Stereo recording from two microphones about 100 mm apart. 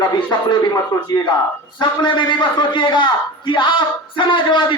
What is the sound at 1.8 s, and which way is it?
A man's voice, 50° left (ahead or behind).